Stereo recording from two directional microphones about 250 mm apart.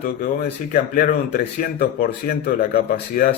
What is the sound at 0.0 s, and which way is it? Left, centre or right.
A man's voice, left.